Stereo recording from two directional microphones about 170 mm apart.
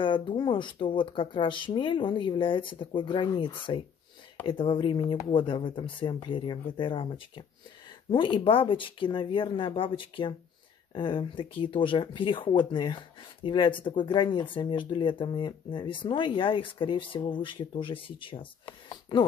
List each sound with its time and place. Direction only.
0.0 s speech: 30° left (ahead or behind)